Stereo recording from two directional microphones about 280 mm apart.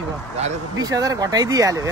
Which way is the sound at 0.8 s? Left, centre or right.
Centre.